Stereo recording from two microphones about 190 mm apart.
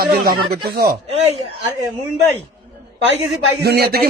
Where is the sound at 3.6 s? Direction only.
55° right (ahead or behind).